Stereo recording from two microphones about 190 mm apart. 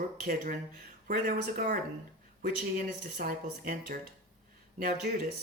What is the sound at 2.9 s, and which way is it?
Speech, 45° right (ahead or behind).